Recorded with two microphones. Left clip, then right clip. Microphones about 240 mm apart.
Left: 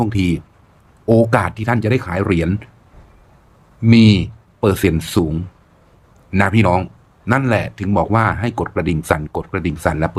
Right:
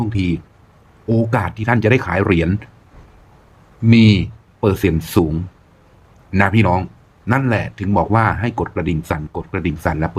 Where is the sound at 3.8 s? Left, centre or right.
Centre.